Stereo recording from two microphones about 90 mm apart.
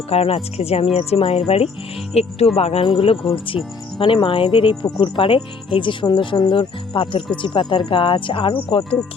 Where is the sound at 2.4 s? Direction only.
90° left.